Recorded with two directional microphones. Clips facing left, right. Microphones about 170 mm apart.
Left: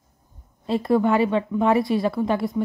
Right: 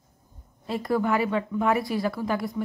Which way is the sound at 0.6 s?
25° left (ahead or behind).